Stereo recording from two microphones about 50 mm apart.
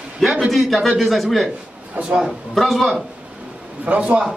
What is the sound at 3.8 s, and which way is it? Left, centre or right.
Speech, right.